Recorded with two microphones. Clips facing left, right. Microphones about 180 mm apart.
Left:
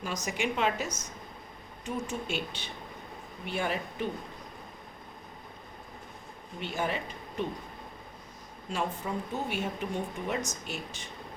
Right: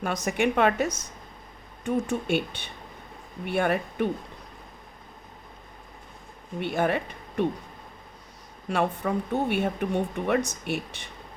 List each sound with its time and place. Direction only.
0.3 s speech: 60° right (ahead or behind)
6.6 s speech: 60° right (ahead or behind)
8.7 s speech: 65° right (ahead or behind)